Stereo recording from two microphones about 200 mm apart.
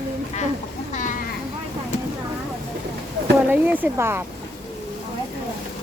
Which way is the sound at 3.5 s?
10° right (ahead or behind).